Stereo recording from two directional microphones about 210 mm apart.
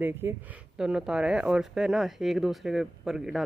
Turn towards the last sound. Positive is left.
turn(degrees=0)  # may be behind; listen again after turning